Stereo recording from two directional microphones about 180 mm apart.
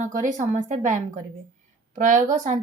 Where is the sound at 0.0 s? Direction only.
45° right (ahead or behind).